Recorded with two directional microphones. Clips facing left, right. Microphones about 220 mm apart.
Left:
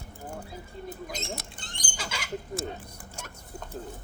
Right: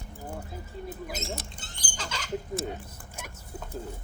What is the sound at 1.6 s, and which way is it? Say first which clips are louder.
Bird: left 2 dB; 5° right (ahead or behind).